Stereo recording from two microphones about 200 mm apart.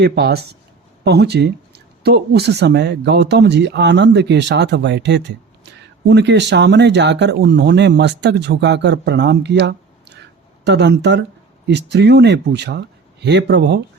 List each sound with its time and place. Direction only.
0.0 s speech: 55° right (ahead or behind)